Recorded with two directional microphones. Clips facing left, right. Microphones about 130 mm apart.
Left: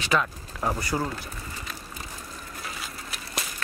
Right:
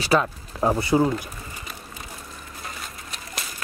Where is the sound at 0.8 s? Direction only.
15° right (ahead or behind).